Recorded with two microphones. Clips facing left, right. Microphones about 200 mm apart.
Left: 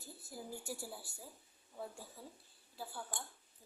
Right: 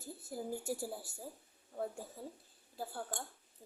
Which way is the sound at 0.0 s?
50° right (ahead or behind).